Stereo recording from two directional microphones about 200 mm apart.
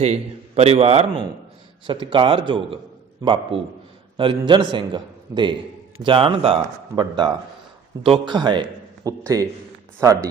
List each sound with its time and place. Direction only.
0.0 s a man's voice: 35° right (ahead or behind); by 9.5 s 15° right (ahead or behind)